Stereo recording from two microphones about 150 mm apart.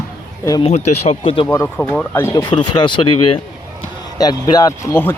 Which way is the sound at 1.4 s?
15° left (ahead or behind).